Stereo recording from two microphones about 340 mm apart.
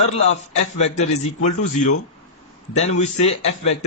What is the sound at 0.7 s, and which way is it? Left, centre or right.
Speech, centre.